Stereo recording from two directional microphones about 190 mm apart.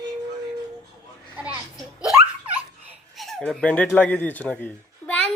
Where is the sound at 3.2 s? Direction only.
Centre (ahead or behind).